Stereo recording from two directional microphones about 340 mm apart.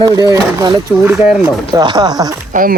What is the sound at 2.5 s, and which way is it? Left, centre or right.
Speech, right.